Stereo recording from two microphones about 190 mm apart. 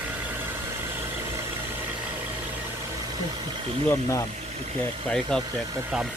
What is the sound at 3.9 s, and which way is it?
Speech, 15° left (ahead or behind).